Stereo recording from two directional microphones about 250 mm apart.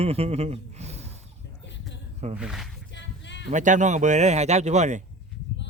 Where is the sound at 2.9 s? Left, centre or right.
Left.